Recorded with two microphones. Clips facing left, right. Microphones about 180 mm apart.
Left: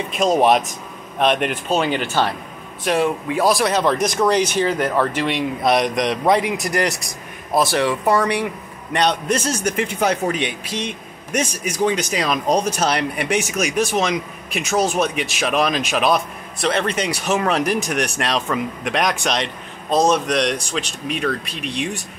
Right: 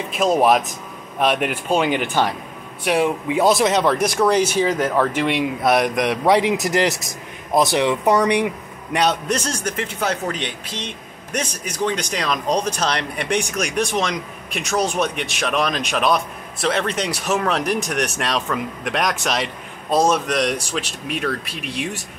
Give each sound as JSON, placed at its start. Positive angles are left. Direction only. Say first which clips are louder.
{"t": 0.1, "sound": "speech", "louder": "even", "side_deg": 0}
{"t": 3.8, "sound": "speech", "louder": "even", "side_deg": -10}
{"t": 6.4, "sound": "a man's voice", "louder": "right 2 dB", "side_deg": -20}
{"t": 8.9, "sound": "a man's voice", "louder": "left 1 dB", "side_deg": -5}